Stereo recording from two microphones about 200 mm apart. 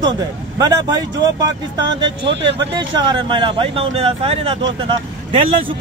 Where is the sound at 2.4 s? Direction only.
25° right (ahead or behind).